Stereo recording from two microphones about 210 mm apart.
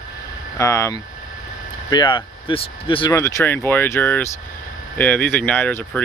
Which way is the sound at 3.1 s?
10° left (ahead or behind).